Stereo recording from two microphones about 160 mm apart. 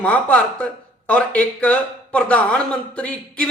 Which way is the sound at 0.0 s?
10° left (ahead or behind).